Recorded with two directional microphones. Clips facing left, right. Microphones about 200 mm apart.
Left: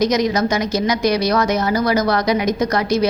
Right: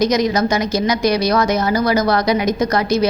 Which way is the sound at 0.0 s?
30° right (ahead or behind).